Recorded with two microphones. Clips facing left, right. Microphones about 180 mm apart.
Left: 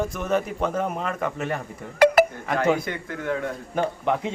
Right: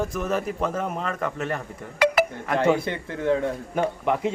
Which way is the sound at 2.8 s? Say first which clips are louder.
Right 3 dB; 25° right (ahead or behind).